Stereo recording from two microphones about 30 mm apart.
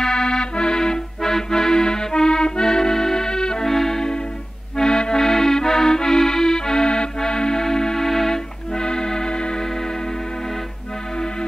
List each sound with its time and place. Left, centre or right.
0.0 s accordion: left
3.6 s music: centre
4.7 s accordion: left
7.2 s music: left
8.7 s music: left